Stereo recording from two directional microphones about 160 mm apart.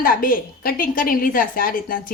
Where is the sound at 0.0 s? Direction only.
60° left (ahead or behind).